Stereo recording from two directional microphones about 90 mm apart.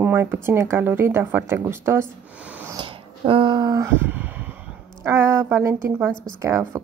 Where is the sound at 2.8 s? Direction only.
70° right (ahead or behind); by 3.9 s 45° right (ahead or behind).